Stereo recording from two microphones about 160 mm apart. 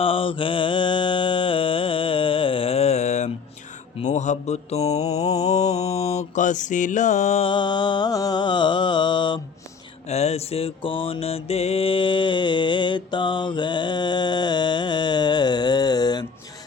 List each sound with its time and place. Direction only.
0.0 s mantra: 35° left (ahead or behind)
10.1 s mantra: 40° left (ahead or behind); by 16.2 s 25° left (ahead or behind)